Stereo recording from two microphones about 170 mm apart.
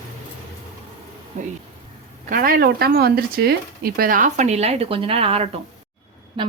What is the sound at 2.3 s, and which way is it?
Speech, 60° right (ahead or behind).